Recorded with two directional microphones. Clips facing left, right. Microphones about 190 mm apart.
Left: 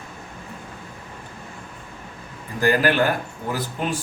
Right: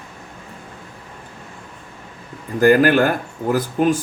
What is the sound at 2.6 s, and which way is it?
Speech, 50° right (ahead or behind).